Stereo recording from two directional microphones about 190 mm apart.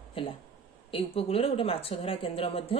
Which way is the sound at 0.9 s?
30° left (ahead or behind).